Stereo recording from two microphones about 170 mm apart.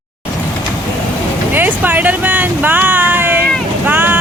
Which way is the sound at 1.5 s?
10° right (ahead or behind).